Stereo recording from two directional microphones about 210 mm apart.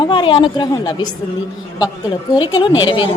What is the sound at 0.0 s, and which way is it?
A woman's voice, 25° left (ahead or behind).